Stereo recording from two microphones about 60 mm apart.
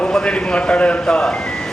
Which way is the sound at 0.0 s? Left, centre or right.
Centre.